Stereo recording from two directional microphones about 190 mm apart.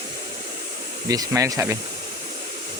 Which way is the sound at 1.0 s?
20° right (ahead or behind).